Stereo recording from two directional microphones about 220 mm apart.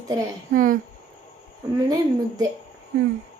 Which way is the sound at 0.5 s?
40° right (ahead or behind).